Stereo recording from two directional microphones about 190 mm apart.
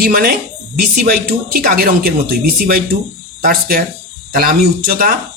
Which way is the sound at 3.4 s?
50° right (ahead or behind).